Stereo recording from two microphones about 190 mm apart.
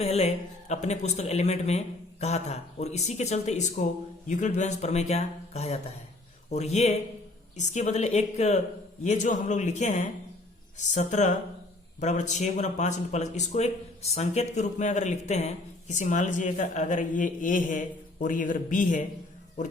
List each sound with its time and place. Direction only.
0.0 s speech: 35° left (ahead or behind)